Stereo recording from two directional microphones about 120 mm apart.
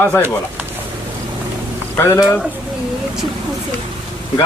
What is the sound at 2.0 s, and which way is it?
Speech, 20° left (ahead or behind).